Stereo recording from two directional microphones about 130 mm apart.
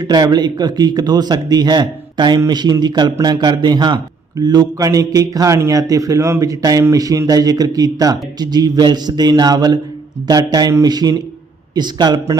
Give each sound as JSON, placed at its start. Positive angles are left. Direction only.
{"t": 0.0, "sound": "speech", "side_deg": -30}